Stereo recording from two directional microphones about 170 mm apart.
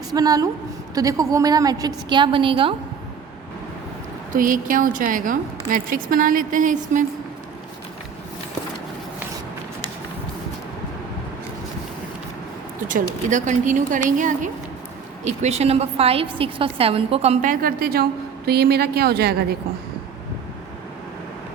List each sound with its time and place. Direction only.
0.1 s a woman's voice: 20° right (ahead or behind)
4.3 s a woman's voice: 50° right (ahead or behind)
12.9 s a woman's voice: 50° right (ahead or behind); by 19.5 s 70° right (ahead or behind)